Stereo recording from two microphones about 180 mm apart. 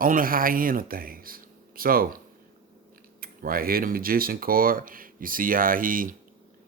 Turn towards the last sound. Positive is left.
turn(degrees=-50)  # may be behind; listen again after turning